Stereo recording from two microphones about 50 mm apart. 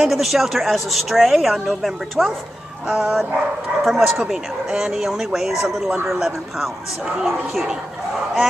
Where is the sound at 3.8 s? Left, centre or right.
Centre.